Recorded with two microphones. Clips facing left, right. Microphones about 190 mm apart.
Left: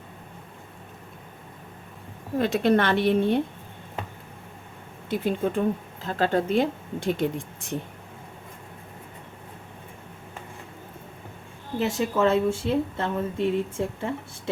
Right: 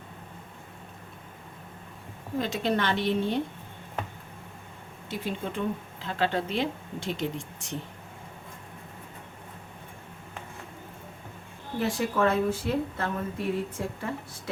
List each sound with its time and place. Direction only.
2.4 s a woman's voice: 55° left (ahead or behind)
5.0 s a woman's voice: 55° left (ahead or behind)
11.8 s speech: 25° left (ahead or behind)